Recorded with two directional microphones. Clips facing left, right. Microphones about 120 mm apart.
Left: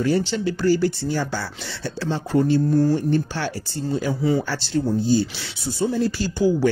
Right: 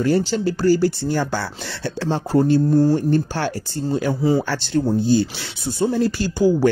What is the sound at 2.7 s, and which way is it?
Speech, 35° right (ahead or behind).